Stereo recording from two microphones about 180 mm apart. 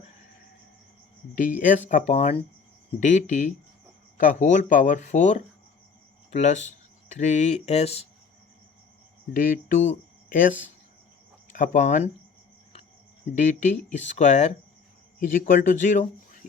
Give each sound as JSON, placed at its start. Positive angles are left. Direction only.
{"t": 1.4, "sound": "speech", "side_deg": 45}
{"t": 9.3, "sound": "speech", "side_deg": 50}
{"t": 11.5, "sound": "speech", "side_deg": 45}
{"t": 13.3, "sound": "speech", "side_deg": 45}